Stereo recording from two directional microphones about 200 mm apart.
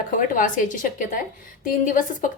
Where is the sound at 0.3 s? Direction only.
40° left (ahead or behind).